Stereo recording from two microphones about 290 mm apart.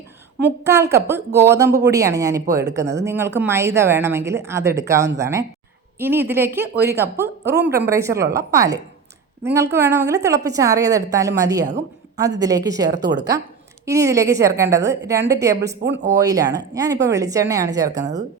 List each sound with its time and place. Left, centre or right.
0.6 s speech: centre
12.9 s speech: right
13.8 s speech: centre
15.8 s speech: right
16.1 s speech: centre